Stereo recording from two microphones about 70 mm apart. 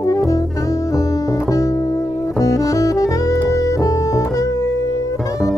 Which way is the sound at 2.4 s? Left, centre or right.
Left.